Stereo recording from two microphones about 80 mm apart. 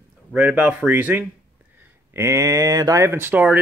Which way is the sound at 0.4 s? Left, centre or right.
Centre.